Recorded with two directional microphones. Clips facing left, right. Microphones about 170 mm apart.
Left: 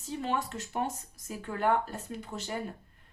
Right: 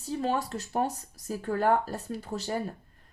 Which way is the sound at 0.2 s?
35° right (ahead or behind).